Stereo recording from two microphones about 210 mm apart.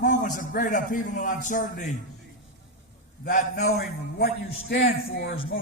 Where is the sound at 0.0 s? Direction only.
35° left (ahead or behind).